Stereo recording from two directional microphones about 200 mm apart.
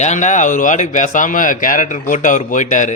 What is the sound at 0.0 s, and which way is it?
Speech, 35° left (ahead or behind).